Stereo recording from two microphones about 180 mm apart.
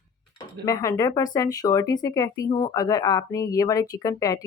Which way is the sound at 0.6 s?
20° left (ahead or behind).